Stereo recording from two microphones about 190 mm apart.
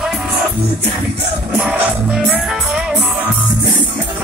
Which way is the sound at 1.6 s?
Centre (ahead or behind).